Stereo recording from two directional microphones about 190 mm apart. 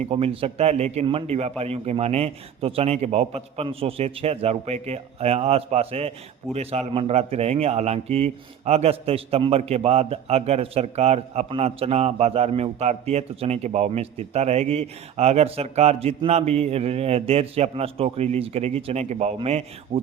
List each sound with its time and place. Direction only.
0.0 s a man's voice: 30° right (ahead or behind)